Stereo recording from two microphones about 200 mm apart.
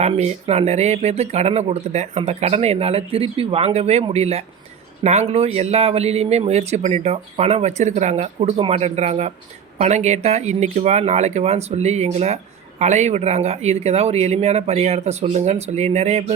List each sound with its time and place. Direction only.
0.0 s speech: 35° right (ahead or behind)